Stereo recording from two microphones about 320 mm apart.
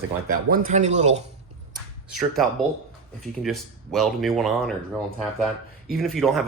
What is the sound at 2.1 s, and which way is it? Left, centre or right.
Speech, centre.